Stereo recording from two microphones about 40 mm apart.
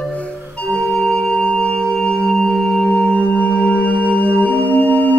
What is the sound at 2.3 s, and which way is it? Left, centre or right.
Singing bowl, centre.